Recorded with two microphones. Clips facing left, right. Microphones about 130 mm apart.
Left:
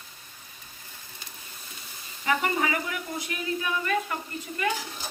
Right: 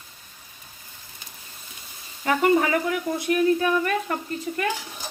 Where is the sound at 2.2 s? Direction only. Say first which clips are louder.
Right 6 dB; 45° right (ahead or behind).